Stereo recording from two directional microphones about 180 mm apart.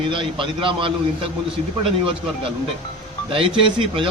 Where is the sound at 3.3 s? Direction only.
30° right (ahead or behind).